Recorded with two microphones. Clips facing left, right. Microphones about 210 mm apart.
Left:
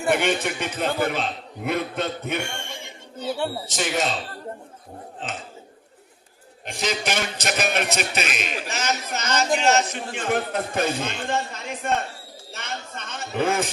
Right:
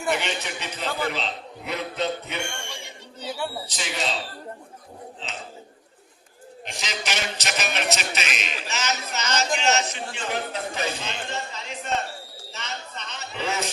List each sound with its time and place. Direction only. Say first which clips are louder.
0.1 s a man's voice: left 6 dB; 50° left (ahead or behind)
3.7 s a man's voice: left 5 dB; 50° left (ahead or behind)
5.2 s a man's voice: left 5 dB; 50° left (ahead or behind)
6.7 s a man's voice: left 6 dB; 55° left (ahead or behind)
12.5 s a sound: left 3 dB; 55° left (ahead or behind)